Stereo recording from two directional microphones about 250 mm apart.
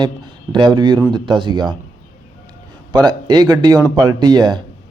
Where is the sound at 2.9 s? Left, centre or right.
Centre.